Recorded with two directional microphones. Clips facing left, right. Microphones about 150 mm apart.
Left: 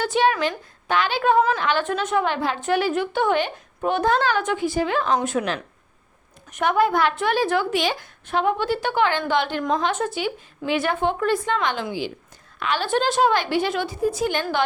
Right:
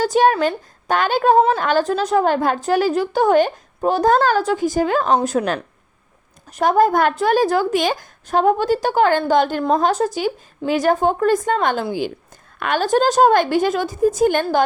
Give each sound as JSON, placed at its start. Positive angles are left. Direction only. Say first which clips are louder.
{"t": 0.0, "sound": "a woman's voice", "louder": "right 5 dB", "side_deg": -40}